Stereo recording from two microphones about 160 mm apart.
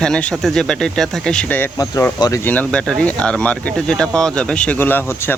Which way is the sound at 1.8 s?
20° left (ahead or behind).